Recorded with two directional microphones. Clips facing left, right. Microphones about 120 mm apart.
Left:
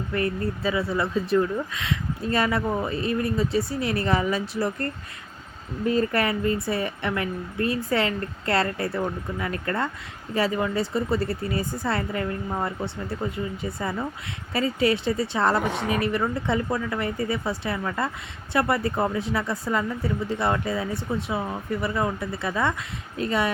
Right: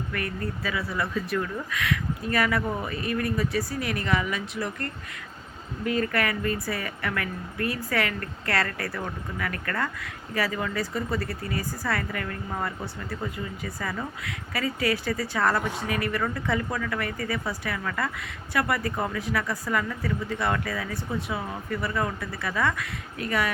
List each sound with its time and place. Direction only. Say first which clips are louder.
0.1 s speech: left 8 dB; 25° left (ahead or behind)